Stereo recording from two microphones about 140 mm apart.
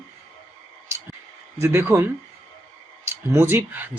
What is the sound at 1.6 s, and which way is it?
Speech, 20° right (ahead or behind).